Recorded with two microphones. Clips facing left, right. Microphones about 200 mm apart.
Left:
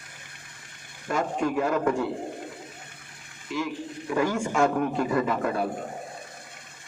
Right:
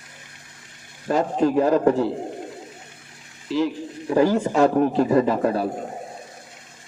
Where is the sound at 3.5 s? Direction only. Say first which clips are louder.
Right 7 dB; 30° right (ahead or behind).